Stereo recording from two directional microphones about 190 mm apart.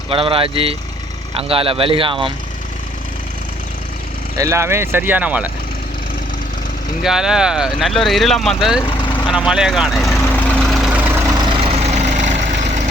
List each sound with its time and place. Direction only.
0.1 s speech: 30° right (ahead or behind)
4.4 s speech: 15° right (ahead or behind)
7.0 s speech: 5° right (ahead or behind)
8.8 s vehicle: 25° left (ahead or behind)
9.3 s vehicle: 5° right (ahead or behind)
11.7 s vehicle: 35° right (ahead or behind)